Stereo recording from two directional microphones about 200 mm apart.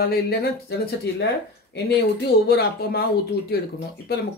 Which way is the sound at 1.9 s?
50° left (ahead or behind).